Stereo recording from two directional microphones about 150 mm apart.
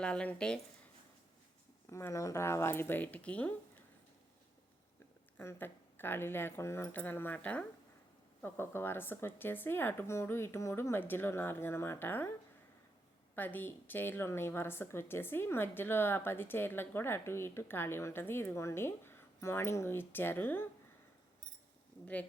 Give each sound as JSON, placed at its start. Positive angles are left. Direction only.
{"t": 0.0, "sound": "a woman's voice", "side_deg": 5}
{"t": 1.9, "sound": "a woman's voice", "side_deg": 20}
{"t": 5.4, "sound": "a woman's voice", "side_deg": 15}
{"t": 13.3, "sound": "a woman's voice", "side_deg": 10}
{"t": 22.0, "sound": "a woman's voice", "side_deg": 10}